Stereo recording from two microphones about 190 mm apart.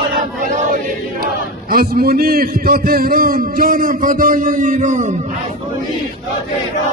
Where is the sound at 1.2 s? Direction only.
50° right (ahead or behind).